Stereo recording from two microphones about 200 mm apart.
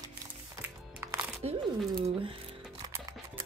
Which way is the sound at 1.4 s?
30° right (ahead or behind).